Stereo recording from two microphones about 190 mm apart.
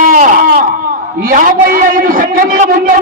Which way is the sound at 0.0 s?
45° right (ahead or behind).